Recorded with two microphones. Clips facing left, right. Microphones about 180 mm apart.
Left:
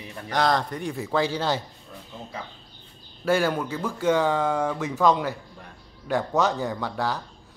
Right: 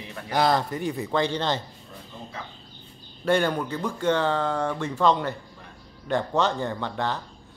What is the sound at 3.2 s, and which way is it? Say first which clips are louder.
Speech: even; 5° left (ahead or behind).